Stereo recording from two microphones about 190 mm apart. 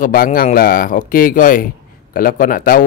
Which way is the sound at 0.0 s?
45° left (ahead or behind).